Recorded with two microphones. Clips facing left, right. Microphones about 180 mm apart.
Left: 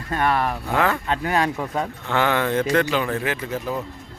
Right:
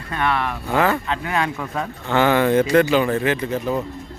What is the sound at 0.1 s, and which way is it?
Speech, 40° left (ahead or behind).